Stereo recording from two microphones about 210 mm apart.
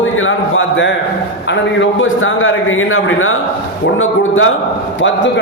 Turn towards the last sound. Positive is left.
turn(degrees=70)  # may be behind; listen again after turning